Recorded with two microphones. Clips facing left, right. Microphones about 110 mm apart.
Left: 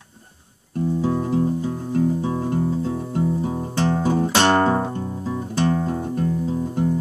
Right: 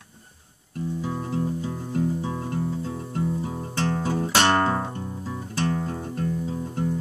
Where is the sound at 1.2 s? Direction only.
20° left (ahead or behind).